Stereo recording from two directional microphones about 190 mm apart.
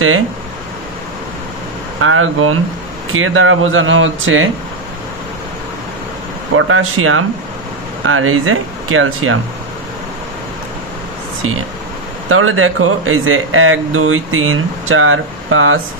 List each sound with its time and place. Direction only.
2.0 s speech: 90° right
6.5 s speech: 90° right
12.3 s speech: 90° right